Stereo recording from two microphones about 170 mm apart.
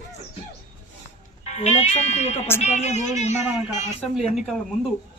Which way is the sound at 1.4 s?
40° left (ahead or behind).